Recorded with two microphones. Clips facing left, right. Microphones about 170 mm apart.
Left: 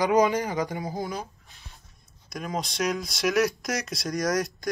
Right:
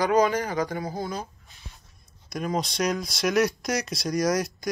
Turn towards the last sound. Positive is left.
turn(degrees=0)  # may be behind; listen again after turning